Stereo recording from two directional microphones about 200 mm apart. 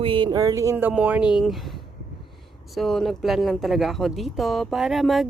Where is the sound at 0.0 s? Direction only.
25° right (ahead or behind).